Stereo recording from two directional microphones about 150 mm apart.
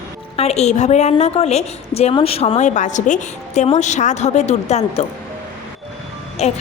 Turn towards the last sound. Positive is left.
turn(degrees=45)  # may be behind; listen again after turning